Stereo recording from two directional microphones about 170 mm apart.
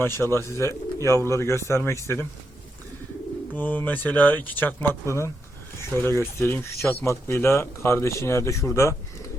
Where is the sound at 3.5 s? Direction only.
10° left (ahead or behind).